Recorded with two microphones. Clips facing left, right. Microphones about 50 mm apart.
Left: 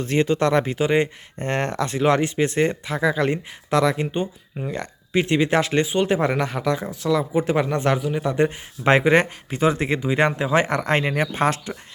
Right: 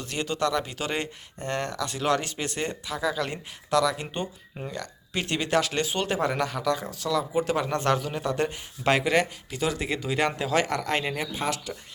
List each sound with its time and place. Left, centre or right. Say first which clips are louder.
0.0 s speech: left 8 dB; left
0.8 s speech: left 10 dB; left
4.0 s speech: left 7 dB; centre
5.8 s speech: left 7 dB; centre
6.4 s speech: left 3 dB; left